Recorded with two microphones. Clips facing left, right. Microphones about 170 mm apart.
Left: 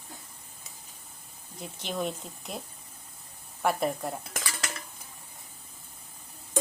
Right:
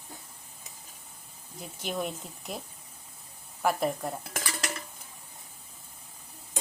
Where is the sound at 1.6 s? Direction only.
5° right (ahead or behind).